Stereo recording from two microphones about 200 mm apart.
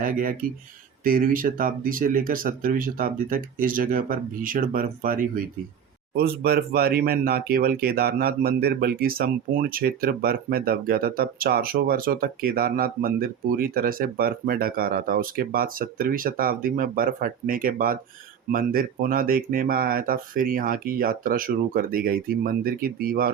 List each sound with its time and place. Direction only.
0.0 s speech: 45° right (ahead or behind)